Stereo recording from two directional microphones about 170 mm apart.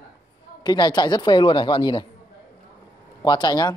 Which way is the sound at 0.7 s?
25° left (ahead or behind).